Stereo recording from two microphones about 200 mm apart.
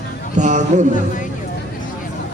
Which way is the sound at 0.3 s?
35° right (ahead or behind).